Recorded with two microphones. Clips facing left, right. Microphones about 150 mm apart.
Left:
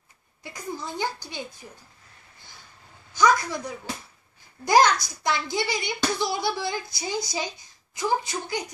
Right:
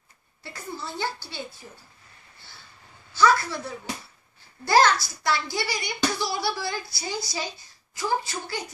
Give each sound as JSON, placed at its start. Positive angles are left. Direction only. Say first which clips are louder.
{"t": 0.4, "sound": "a woman's voice", "louder": "left 2 dB", "side_deg": 15}
{"t": 3.1, "sound": "a sound", "louder": "even", "side_deg": 15}
{"t": 4.6, "sound": "a child's voice", "louder": "left 1 dB", "side_deg": 15}